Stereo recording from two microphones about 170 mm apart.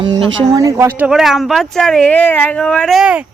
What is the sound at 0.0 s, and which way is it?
Speech, 30° right (ahead or behind).